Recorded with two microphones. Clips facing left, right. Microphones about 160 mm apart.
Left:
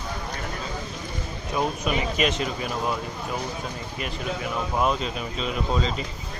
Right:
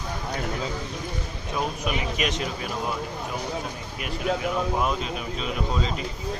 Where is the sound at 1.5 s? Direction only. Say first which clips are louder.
Left 3 dB; centre (ahead or behind).